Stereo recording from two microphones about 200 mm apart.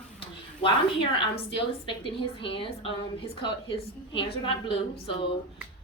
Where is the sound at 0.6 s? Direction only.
25° left (ahead or behind).